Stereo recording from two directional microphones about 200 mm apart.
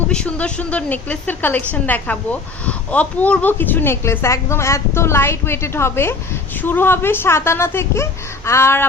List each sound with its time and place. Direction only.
0.1 s a woman's voice: 5° left (ahead or behind)